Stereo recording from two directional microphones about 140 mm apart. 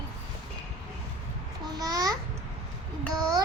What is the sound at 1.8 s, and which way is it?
Speech, 25° right (ahead or behind).